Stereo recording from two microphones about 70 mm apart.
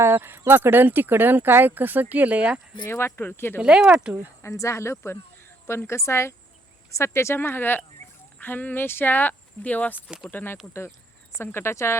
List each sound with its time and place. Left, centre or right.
0.0 s speech: right; by 2.6 s centre
2.8 s speech: left
3.6 s speech: centre
4.4 s a woman's voice: left